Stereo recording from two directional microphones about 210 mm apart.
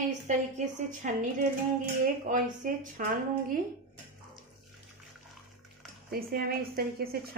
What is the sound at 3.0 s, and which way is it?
Speech, 40° right (ahead or behind).